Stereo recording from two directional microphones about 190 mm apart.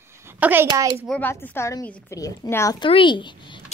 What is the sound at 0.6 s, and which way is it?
Speech, 20° right (ahead or behind).